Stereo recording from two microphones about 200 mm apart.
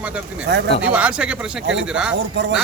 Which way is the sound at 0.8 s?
5° right (ahead or behind).